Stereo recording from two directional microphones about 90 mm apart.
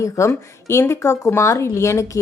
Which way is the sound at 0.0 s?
30° left (ahead or behind).